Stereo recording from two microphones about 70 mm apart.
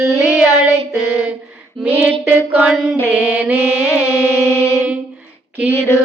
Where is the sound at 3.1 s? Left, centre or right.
Right.